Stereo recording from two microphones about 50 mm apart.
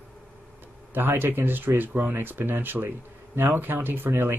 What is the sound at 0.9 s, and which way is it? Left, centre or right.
Speech, right.